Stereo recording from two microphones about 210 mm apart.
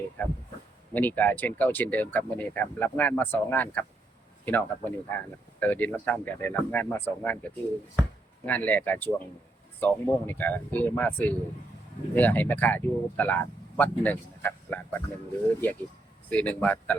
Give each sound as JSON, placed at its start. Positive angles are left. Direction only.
{"t": 0.2, "sound": "speech", "side_deg": 10}
{"t": 8.4, "sound": "speech", "side_deg": 10}
{"t": 16.3, "sound": "speech", "side_deg": 5}